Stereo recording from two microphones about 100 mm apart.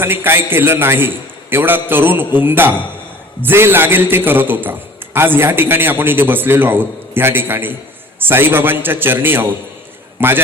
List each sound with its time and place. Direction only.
0.0 s a man's voice: 20° right (ahead or behind)